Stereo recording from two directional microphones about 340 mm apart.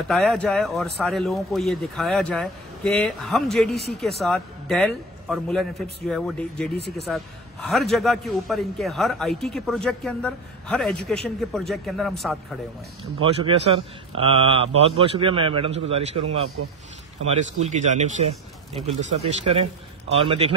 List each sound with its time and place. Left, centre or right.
0.1 s speech: centre
13.2 s a man's voice: centre
17.4 s speech: centre